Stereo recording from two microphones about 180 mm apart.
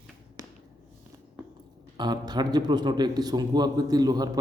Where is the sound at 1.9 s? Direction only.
25° right (ahead or behind).